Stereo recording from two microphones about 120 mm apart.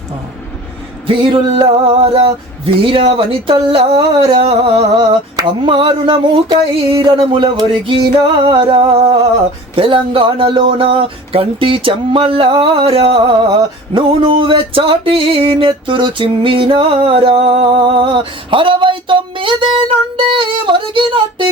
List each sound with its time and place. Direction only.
1.0 s speech: 45° right (ahead or behind)
5.4 s a sound: 40° right (ahead or behind)
9.7 s speech: 50° right (ahead or behind)